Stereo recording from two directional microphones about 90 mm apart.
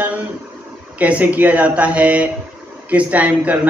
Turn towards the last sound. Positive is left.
turn(degrees=-15)  # may be behind; listen again after turning